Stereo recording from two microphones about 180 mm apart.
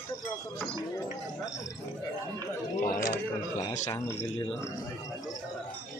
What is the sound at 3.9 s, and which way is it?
Speech, 15° left (ahead or behind).